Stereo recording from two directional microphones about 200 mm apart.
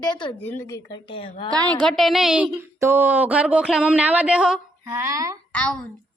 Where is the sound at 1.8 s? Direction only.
Centre (ahead or behind).